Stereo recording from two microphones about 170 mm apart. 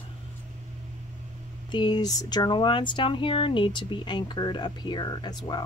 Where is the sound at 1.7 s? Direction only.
25° left (ahead or behind).